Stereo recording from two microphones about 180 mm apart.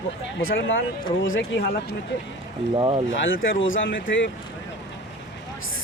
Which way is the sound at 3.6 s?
90° left.